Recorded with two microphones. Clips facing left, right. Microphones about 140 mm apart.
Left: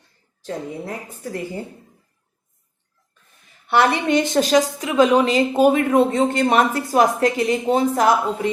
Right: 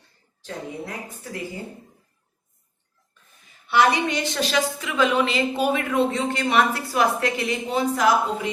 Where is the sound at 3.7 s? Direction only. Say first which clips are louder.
Left 3 dB; 55° left (ahead or behind).